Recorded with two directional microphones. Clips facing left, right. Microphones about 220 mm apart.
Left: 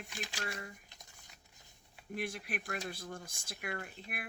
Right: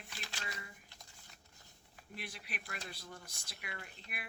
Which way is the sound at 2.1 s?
50° left (ahead or behind).